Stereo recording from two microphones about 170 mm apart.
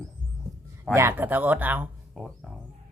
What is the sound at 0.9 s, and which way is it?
Speech, 15° right (ahead or behind).